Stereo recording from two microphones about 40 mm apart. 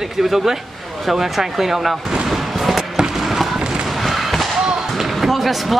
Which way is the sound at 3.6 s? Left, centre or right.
Right.